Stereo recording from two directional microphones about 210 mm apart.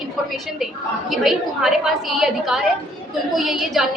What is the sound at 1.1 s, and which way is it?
A woman's voice, centre (ahead or behind).